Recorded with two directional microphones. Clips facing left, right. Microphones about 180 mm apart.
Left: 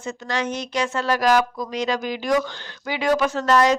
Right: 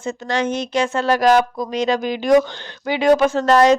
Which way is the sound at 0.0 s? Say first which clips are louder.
Right 5 dB; 25° right (ahead or behind).